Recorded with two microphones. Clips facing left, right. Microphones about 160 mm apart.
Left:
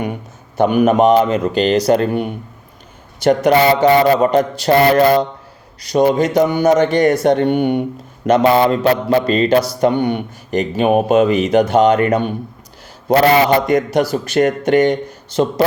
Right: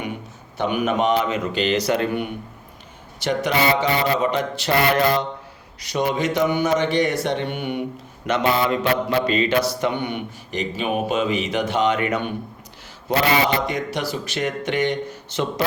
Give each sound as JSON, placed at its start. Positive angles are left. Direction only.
{"t": 0.5, "sound": "speech", "side_deg": 45}
{"t": 1.9, "sound": "mantra", "side_deg": 40}
{"t": 3.2, "sound": "speech", "side_deg": 45}
{"t": 8.3, "sound": "mantra", "side_deg": 35}
{"t": 9.8, "sound": "speech", "side_deg": 40}
{"t": 13.7, "sound": "speech", "side_deg": 50}